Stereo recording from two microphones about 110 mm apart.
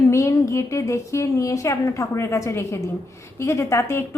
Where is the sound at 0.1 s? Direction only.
25° left (ahead or behind).